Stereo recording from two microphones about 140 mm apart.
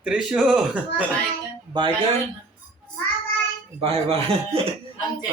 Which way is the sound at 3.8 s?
45° right (ahead or behind).